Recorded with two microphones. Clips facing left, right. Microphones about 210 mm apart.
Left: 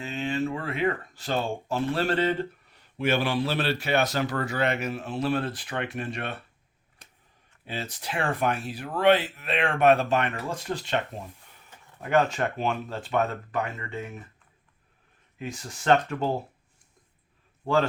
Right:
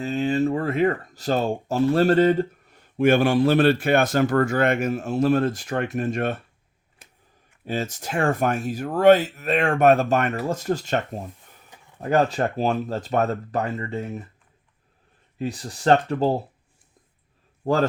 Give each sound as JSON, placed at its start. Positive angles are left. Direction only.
{"t": 0.0, "sound": "speech", "side_deg": -40}
{"t": 7.6, "sound": "speech", "side_deg": -45}
{"t": 15.4, "sound": "speech", "side_deg": -35}
{"t": 17.6, "sound": "speech", "side_deg": -40}